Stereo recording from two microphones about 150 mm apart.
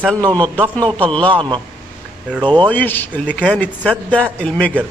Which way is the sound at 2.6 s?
10° left (ahead or behind).